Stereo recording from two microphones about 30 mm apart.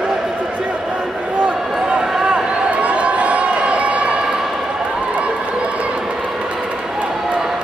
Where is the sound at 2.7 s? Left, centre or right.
Right.